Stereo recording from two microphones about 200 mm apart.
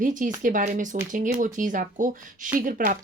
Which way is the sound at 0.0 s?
40° right (ahead or behind).